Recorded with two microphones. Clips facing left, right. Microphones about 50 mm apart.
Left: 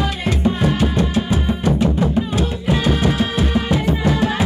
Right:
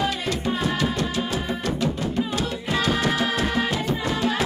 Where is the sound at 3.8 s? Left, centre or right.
Left.